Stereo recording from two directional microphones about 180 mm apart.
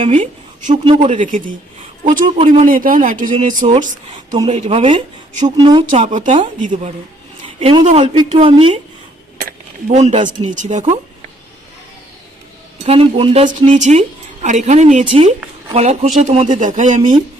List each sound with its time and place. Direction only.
0.0 s a woman's voice: 35° right (ahead or behind)
5.8 s speech: 45° right (ahead or behind)
7.4 s a sound: 30° right (ahead or behind)
7.9 s speech: 30° right (ahead or behind)
9.8 s speech: 40° right (ahead or behind)
12.8 s speech: 35° right (ahead or behind)